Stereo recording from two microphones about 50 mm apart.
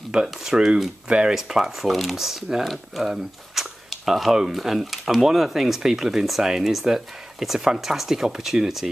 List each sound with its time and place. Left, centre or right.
0.1 s speech: centre
1.3 s speech: centre